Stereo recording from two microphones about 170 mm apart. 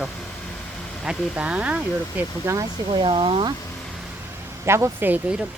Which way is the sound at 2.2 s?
20° right (ahead or behind).